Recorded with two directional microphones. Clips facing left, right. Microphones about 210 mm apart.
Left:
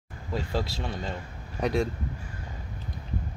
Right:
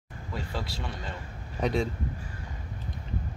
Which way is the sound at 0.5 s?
30° left (ahead or behind).